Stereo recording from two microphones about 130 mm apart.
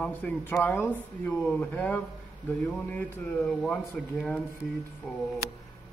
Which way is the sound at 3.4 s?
5° left (ahead or behind).